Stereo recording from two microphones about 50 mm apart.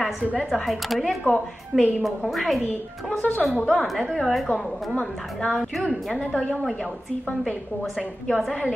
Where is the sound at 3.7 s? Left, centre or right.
Centre.